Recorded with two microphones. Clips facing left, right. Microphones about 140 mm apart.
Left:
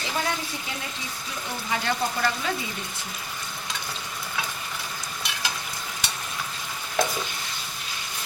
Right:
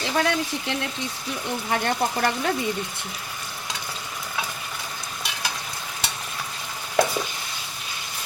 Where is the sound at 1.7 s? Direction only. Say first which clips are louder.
Right 3 dB; 55° right (ahead or behind).